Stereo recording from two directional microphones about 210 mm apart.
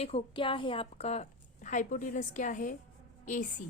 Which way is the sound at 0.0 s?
25° left (ahead or behind).